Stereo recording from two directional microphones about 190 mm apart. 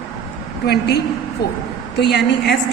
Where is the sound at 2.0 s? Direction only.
60° left (ahead or behind).